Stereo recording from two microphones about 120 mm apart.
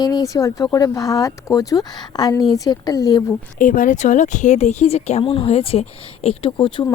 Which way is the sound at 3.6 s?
90° left.